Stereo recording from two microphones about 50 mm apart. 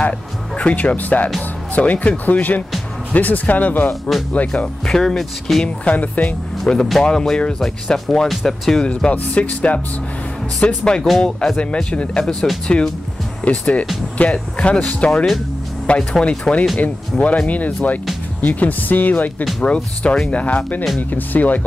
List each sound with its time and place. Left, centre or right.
0.6 s speech: left
4.8 s speech: centre
5.9 s speech: left
6.6 s speech: centre
9.1 s speech: left
10.6 s speech: centre
11.5 s speech: left
16.7 s speech: left
19.6 s speech: left